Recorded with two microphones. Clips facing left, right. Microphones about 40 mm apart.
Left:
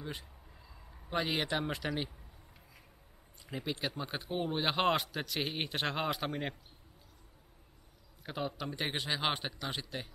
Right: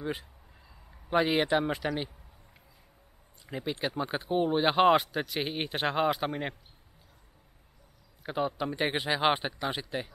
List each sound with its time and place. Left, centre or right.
0.0 s speech: centre
3.4 s speech: centre
8.2 s speech: centre